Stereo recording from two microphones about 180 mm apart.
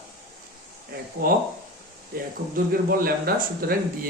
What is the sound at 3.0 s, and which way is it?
Speech, 55° right (ahead or behind).